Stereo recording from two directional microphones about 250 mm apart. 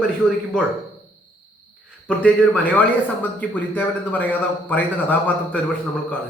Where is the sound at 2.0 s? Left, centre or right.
Centre.